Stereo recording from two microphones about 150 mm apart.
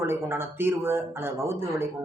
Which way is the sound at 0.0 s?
15° right (ahead or behind).